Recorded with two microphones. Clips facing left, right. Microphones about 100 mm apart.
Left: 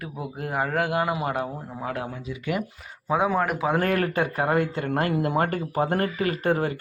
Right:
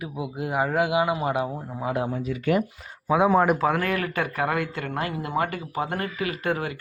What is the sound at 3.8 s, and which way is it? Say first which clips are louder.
Speech: left 3 dB; 40° left (ahead or behind).